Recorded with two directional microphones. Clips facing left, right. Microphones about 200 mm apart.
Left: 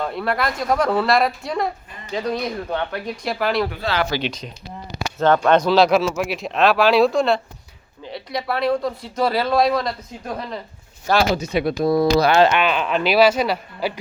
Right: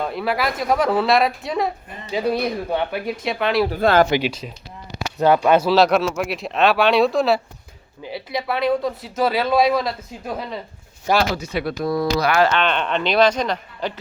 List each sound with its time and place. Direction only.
0.0 s speech: centre (ahead or behind)
3.2 s speech: centre (ahead or behind)
3.8 s speech: 50° right (ahead or behind)
4.2 s speech: 5° right (ahead or behind)
11.3 s speech: 20° left (ahead or behind)
12.5 s speech: 10° left (ahead or behind)